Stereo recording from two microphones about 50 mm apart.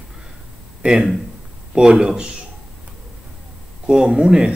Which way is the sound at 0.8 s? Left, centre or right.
Centre.